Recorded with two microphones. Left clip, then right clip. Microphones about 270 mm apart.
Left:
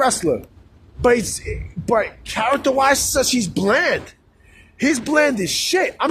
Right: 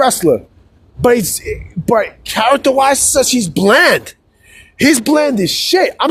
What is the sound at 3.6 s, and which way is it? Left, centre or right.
Speech, right.